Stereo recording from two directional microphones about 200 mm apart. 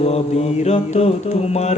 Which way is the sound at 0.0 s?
30° left (ahead or behind).